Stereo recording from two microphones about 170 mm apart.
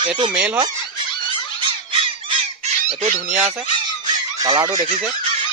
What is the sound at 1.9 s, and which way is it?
Squawk, 30° right (ahead or behind).